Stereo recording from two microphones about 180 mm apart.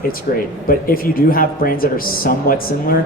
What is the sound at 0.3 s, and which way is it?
Speech, 55° left (ahead or behind).